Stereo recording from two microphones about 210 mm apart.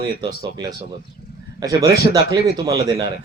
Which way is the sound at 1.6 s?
15° right (ahead or behind).